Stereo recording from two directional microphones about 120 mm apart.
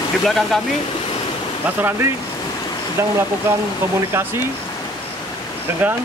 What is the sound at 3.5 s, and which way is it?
Speech, 20° right (ahead or behind).